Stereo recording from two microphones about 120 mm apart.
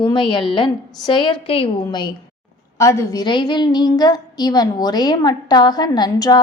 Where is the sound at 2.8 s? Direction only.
25° left (ahead or behind).